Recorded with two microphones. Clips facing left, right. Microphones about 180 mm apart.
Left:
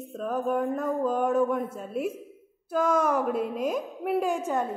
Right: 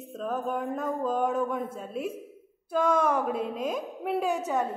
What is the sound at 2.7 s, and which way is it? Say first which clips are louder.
Music: even; 5° left (ahead or behind).